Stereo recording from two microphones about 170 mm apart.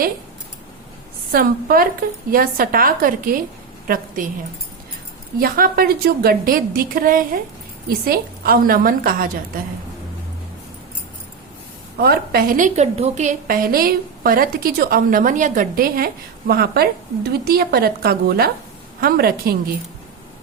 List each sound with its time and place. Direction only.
1.3 s a woman's voice: 60° right (ahead or behind)
5.4 s a woman's voice: 60° right (ahead or behind)
11.9 s a woman's voice: 65° right (ahead or behind); by 13.3 s 40° right (ahead or behind)
13.5 s a woman's voice: 60° right (ahead or behind)